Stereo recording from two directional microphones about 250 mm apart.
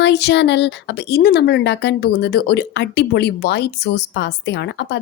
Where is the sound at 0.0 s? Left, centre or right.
Left.